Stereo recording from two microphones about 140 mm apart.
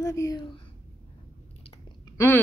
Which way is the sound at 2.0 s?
20° left (ahead or behind).